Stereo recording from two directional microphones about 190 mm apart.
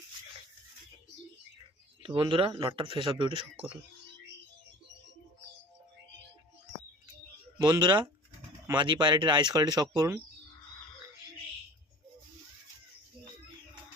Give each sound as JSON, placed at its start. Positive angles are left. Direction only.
{"t": 2.0, "sound": "speech", "side_deg": -25}
{"t": 7.8, "sound": "speech", "side_deg": -20}